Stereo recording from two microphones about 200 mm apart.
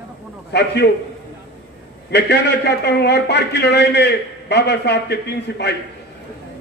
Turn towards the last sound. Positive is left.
turn(degrees=55)  # may be behind; listen again after turning